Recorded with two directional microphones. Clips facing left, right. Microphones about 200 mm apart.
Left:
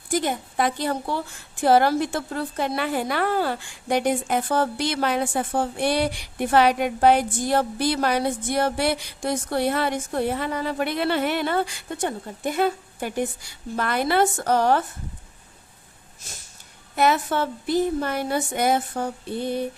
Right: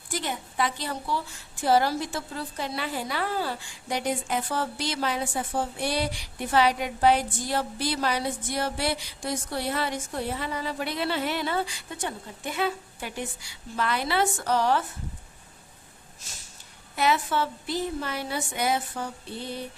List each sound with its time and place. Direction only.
0.1 s a woman's voice: 50° left (ahead or behind)
16.9 s a woman's voice: 50° left (ahead or behind)